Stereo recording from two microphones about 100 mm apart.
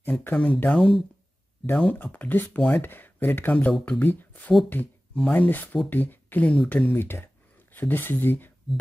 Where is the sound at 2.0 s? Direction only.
15° left (ahead or behind).